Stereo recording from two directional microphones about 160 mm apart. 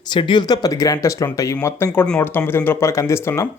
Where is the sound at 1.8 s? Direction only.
5° left (ahead or behind).